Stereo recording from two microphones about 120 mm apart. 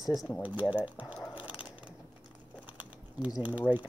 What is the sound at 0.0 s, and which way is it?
Speech, centre (ahead or behind).